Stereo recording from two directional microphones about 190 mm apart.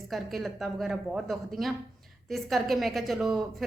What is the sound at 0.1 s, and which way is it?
A woman's voice, centre (ahead or behind).